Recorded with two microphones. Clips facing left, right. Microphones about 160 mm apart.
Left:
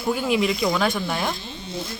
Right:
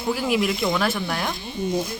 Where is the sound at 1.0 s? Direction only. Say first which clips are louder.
Left 1 dB; 15° left (ahead or behind).